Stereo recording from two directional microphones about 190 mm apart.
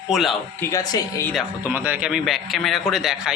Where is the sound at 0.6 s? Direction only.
15° left (ahead or behind).